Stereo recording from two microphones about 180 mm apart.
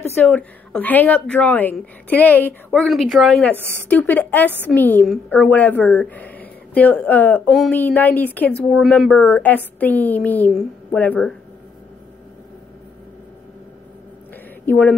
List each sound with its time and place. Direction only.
0.0 s a woman's voice: 10° left (ahead or behind)
14.7 s a woman's voice: 10° left (ahead or behind)